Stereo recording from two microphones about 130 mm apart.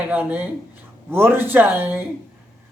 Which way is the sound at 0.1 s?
15° right (ahead or behind).